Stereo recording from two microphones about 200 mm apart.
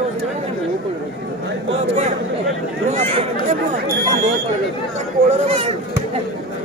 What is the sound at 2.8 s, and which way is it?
Speech, 35° right (ahead or behind).